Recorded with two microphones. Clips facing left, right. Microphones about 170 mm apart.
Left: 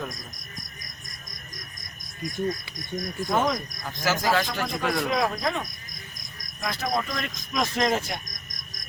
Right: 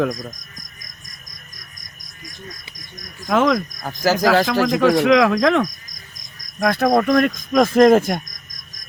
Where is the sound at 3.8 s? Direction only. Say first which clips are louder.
Right 5 dB; 40° right (ahead or behind).